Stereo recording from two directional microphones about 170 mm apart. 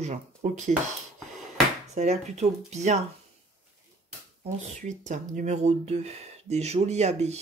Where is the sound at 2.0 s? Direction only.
40° right (ahead or behind).